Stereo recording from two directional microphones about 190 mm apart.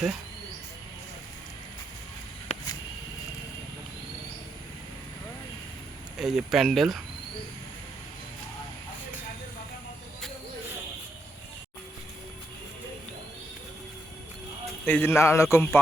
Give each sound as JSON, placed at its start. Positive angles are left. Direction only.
{"t": 2.5, "sound": "a sound", "side_deg": 35}
{"t": 6.1, "sound": "speech", "side_deg": 0}
{"t": 14.8, "sound": "a man's voice", "side_deg": 10}